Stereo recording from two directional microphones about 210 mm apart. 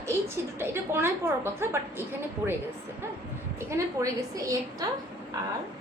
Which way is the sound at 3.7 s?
15° right (ahead or behind).